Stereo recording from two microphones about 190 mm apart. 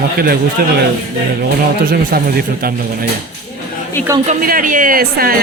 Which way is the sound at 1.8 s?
50° right (ahead or behind).